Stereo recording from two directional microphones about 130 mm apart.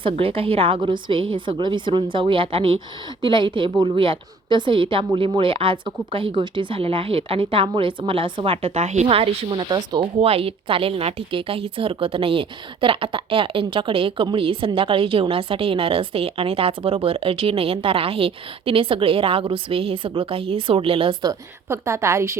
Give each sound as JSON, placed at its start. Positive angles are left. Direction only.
{"t": 0.0, "sound": "a woman's voice", "side_deg": -45}
{"t": 21.7, "sound": "a woman's voice", "side_deg": -20}